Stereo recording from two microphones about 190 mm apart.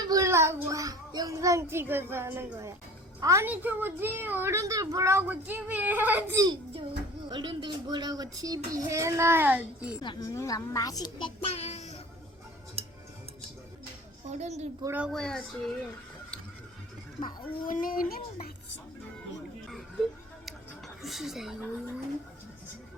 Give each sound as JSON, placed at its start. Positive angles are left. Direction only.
{"t": 0.0, "sound": "child singing", "side_deg": -20}
{"t": 3.2, "sound": "a woman's voice", "side_deg": -15}
{"t": 6.4, "sound": "a child's voice", "side_deg": -25}
{"t": 10.0, "sound": "a child's voice", "side_deg": 20}
{"t": 12.8, "sound": "tick-tock", "side_deg": -30}
{"t": 14.3, "sound": "a child's voice", "side_deg": -35}
{"t": 14.8, "sound": "a woman's voice", "side_deg": -10}
{"t": 15.1, "sound": "speech", "side_deg": 5}
{"t": 17.7, "sound": "a child's voice", "side_deg": 45}
{"t": 19.6, "sound": "a sound", "side_deg": 0}